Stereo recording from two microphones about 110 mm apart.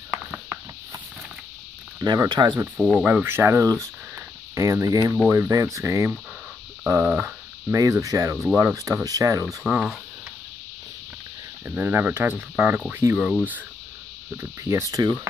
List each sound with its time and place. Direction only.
0.1 s a sound: 10° right (ahead or behind)
2.0 s cricket: 30° right (ahead or behind)
2.2 s speech: 45° right (ahead or behind)
2.6 s speech: 20° right (ahead or behind)
11.6 s speech: 20° right (ahead or behind)
14.3 s speech: 25° right (ahead or behind)